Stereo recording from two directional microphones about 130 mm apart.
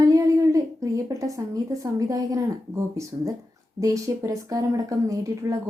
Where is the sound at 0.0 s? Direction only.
25° right (ahead or behind).